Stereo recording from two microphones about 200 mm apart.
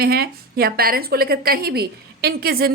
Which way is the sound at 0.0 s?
50° right (ahead or behind).